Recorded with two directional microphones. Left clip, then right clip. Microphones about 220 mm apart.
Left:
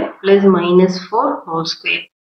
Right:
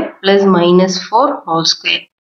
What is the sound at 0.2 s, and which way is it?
A woman's voice, 45° right (ahead or behind).